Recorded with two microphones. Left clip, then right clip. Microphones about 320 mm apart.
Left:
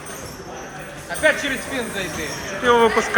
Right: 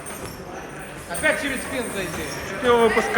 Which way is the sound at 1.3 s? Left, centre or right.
Left.